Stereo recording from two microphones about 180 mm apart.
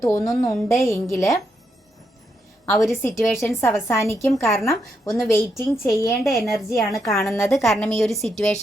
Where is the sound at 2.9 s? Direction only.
15° left (ahead or behind).